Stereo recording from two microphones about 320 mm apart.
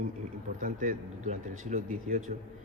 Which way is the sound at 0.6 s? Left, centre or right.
Right.